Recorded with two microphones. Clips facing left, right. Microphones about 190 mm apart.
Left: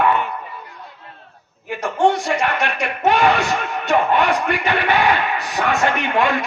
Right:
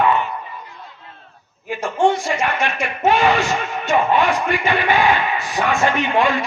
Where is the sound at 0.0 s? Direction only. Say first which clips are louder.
Even; 55° left (ahead or behind).